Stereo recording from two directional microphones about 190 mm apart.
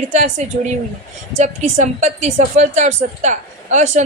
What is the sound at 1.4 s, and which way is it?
A woman's voice, 40° right (ahead or behind).